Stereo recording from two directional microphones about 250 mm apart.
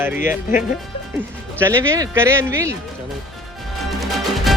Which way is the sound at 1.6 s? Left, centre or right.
Centre.